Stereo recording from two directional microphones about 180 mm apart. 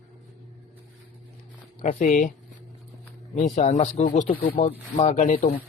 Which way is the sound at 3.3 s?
45° left (ahead or behind).